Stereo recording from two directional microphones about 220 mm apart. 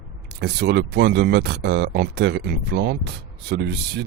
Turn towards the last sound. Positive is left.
turn(degrees=-50)  # may be behind; listen again after turning